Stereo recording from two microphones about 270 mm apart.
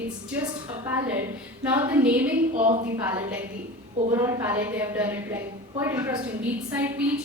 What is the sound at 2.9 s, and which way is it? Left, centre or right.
A woman's voice, centre.